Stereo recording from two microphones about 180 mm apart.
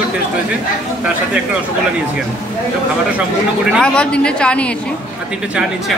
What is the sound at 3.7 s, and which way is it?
Speech, 5° left (ahead or behind).